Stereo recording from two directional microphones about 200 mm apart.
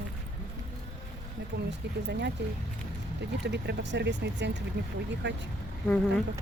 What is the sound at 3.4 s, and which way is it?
Speech, 60° right (ahead or behind).